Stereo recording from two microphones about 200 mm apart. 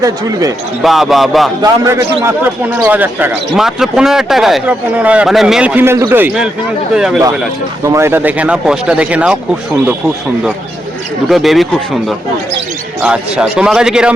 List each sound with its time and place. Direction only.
0.0 s speech: 15° right (ahead or behind)
0.8 s a man's voice: centre (ahead or behind)
1.6 s a man's voice: 15° right (ahead or behind)
7.9 s speech: 15° right (ahead or behind)
11.3 s a man's voice: centre (ahead or behind)